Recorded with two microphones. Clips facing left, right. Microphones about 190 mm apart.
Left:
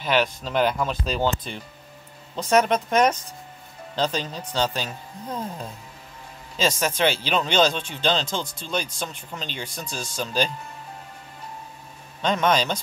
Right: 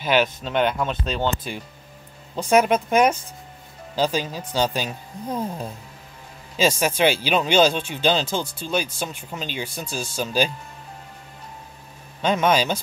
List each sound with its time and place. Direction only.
0.0 s speech: centre (ahead or behind)
12.2 s speech: 5° right (ahead or behind)